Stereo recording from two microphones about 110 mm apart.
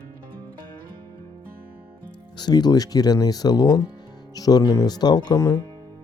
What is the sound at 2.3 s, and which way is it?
Speech, 40° left (ahead or behind).